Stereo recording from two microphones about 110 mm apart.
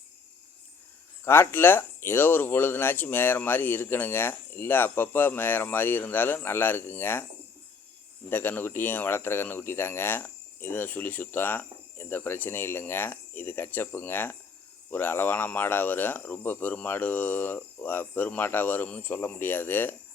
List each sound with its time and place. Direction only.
1.2 s speech: 20° left (ahead or behind)
8.3 s speech: 20° left (ahead or behind)